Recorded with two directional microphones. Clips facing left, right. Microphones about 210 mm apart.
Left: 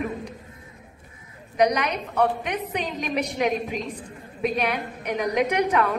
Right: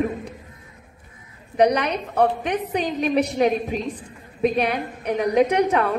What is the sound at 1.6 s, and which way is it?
A woman's voice, 30° right (ahead or behind).